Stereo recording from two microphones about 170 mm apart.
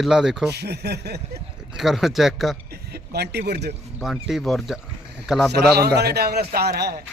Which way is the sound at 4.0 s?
Centre (ahead or behind).